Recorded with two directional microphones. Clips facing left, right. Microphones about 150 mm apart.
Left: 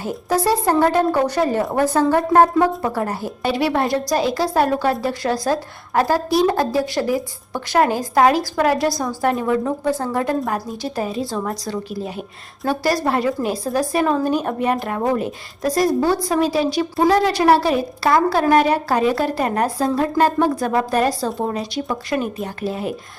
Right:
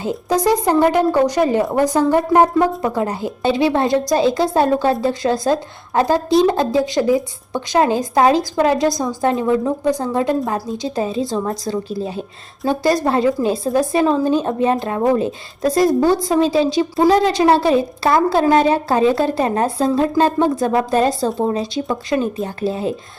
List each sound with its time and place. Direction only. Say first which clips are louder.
0.0 s speech: right 2 dB; 20° right (ahead or behind)
15.9 s a woman's voice: right 3 dB; centre (ahead or behind)
16.1 s speech: right 3 dB; 25° right (ahead or behind)